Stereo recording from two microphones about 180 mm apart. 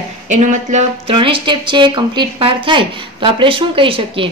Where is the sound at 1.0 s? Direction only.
30° right (ahead or behind).